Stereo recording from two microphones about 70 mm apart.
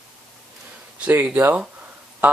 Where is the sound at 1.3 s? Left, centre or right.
Right.